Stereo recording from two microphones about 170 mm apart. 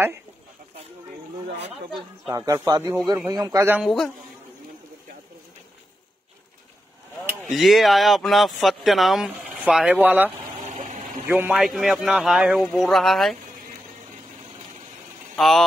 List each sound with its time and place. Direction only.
1.9 s speech: centre (ahead or behind)
2.3 s speech: 20° right (ahead or behind)
7.5 s speech: centre (ahead or behind)
10.7 s a sound: 45° right (ahead or behind)
11.2 s speech: 10° right (ahead or behind)
15.3 s speech: centre (ahead or behind)